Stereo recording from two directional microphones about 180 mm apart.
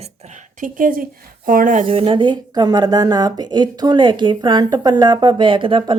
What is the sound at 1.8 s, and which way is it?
A woman's voice, 30° right (ahead or behind).